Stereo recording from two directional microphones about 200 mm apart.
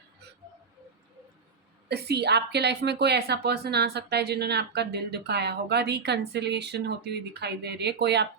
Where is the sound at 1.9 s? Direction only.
55° right (ahead or behind).